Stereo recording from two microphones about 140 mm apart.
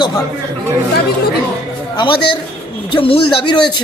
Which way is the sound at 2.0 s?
35° left (ahead or behind).